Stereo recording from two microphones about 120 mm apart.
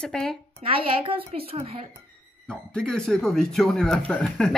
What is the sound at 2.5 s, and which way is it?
A woman's voice, 5° left (ahead or behind).